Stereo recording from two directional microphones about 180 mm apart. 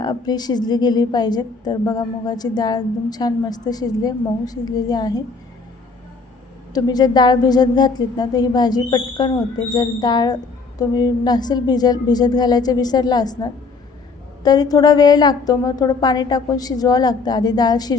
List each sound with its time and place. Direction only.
0.0 s a woman's voice: 20° left (ahead or behind)
6.7 s a woman's voice: 20° left (ahead or behind)